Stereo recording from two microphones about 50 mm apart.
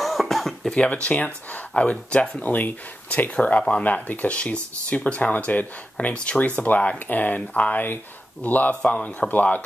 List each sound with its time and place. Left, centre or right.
0.0 s throat clearing: centre
0.8 s speech: left
8.9 s a man's voice: centre
9.3 s speech: left